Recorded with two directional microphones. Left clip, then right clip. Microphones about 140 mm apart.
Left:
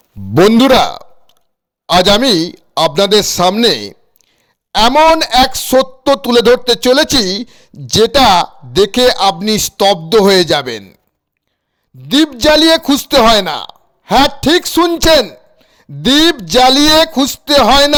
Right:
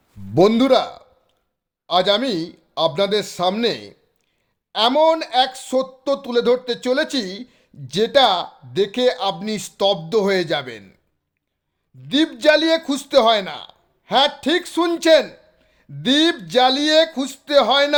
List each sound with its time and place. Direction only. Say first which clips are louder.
0.3 s a man's voice: left 7 dB; 60° left (ahead or behind)
12.0 s a woman's voice: left 6 dB; 50° left (ahead or behind)